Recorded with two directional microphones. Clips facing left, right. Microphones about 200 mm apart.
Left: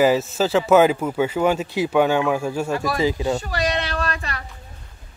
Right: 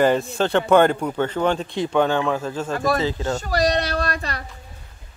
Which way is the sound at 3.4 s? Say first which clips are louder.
Right 3 dB; 40° right (ahead or behind).